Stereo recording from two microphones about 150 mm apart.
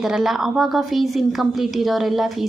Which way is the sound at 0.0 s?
Centre (ahead or behind).